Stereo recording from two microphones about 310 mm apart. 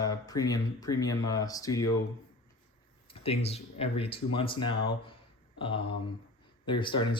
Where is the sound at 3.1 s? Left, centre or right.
Centre.